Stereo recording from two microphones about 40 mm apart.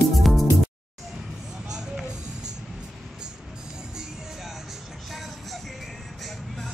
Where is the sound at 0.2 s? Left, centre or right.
Centre.